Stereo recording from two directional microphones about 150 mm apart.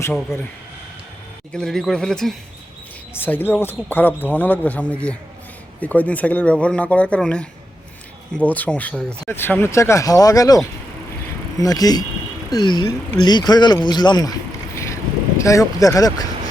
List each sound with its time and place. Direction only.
0.1 s speech: 5° left (ahead or behind)
1.5 s speech: centre (ahead or behind); by 10.6 s 25° left (ahead or behind)
11.6 s speech: 25° left (ahead or behind)
15.4 s speech: 20° left (ahead or behind)